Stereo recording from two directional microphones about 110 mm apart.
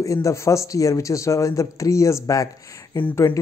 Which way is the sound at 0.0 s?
30° left (ahead or behind).